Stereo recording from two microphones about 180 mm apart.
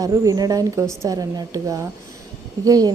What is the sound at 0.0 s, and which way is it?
Speech, 20° right (ahead or behind).